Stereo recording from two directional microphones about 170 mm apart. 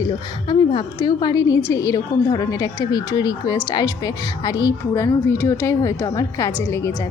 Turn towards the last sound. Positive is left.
turn(degrees=15)  # may be behind; listen again after turning